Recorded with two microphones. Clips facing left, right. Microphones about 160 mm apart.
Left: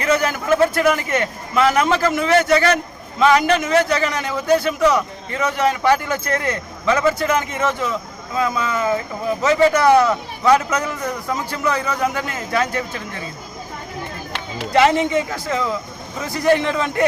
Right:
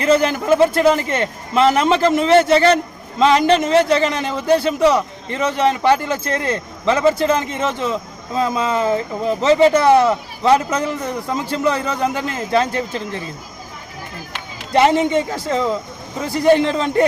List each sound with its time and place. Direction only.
0.0 s a man's voice: 30° right (ahead or behind)
14.7 s a man's voice: 30° right (ahead or behind)